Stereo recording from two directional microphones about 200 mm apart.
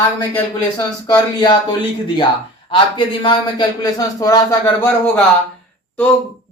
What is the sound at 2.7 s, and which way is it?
Speech, 25° left (ahead or behind).